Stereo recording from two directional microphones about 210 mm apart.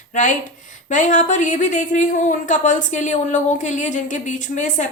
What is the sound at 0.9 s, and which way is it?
Speech, 35° left (ahead or behind).